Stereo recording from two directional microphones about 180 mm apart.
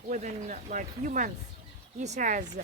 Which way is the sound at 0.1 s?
40° right (ahead or behind).